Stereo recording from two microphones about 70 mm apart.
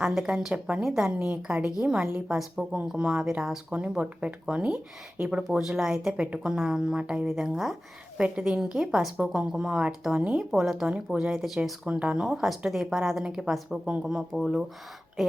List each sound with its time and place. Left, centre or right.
0.0 s a woman's voice: centre
10.5 s a woman's voice: centre
11.9 s a woman's voice: centre
12.2 s speech: centre